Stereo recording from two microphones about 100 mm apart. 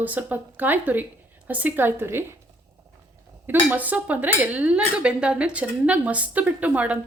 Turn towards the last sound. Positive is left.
turn(degrees=-15)  # may be behind; listen again after turning